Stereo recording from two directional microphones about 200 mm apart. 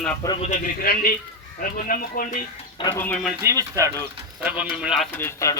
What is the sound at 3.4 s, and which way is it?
A man's voice, 15° right (ahead or behind).